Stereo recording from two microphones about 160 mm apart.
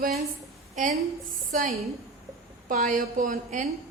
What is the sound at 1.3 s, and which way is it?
A woman's voice, 55° right (ahead or behind).